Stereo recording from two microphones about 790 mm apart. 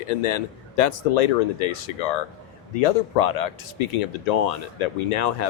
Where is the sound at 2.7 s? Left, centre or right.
Left.